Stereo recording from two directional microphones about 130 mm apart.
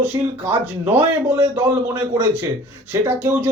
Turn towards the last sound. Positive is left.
turn(degrees=-20)  # may be behind; listen again after turning